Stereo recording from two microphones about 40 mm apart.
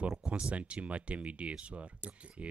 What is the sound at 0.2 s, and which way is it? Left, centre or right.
Speech, right.